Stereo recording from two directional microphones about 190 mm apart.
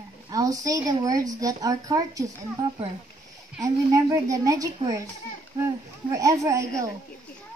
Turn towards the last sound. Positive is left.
turn(degrees=-15)  # may be behind; listen again after turning